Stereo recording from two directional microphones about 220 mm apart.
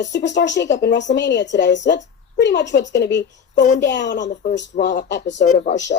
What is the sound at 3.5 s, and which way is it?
Speech, 35° left (ahead or behind).